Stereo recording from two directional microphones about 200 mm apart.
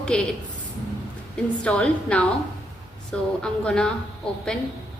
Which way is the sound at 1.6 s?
5° left (ahead or behind).